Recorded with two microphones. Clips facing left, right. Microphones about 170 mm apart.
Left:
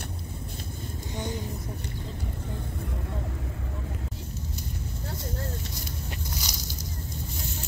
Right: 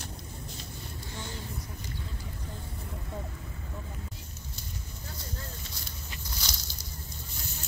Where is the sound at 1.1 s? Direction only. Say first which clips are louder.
Left 9 dB; 20° left (ahead or behind).